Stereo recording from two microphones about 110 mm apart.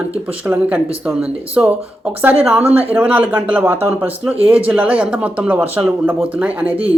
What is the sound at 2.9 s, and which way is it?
Speech, 10° right (ahead or behind).